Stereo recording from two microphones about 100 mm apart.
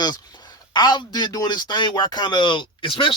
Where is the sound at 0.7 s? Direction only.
45° left (ahead or behind).